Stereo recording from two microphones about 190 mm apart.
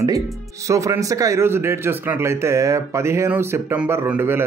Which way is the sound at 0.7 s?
15° right (ahead or behind).